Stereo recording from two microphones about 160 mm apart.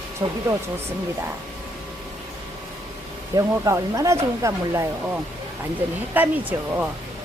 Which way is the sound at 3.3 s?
20° right (ahead or behind).